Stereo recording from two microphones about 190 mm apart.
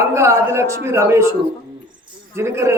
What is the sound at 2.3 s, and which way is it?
Speech, 15° right (ahead or behind).